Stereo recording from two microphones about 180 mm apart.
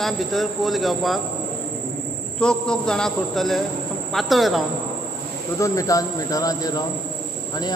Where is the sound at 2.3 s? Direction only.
5° left (ahead or behind).